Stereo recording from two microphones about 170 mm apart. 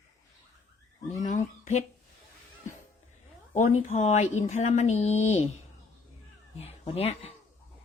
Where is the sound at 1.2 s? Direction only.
45° left (ahead or behind).